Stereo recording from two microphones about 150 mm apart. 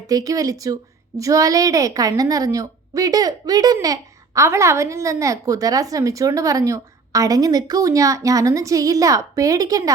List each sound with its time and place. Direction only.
0.1 s speech: 25° right (ahead or behind)